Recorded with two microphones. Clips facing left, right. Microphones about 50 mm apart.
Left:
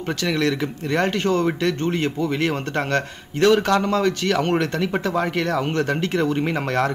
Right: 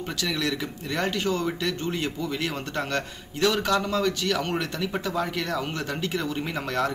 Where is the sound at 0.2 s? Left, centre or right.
Left.